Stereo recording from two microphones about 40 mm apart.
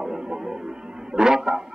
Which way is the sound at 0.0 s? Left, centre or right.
Centre.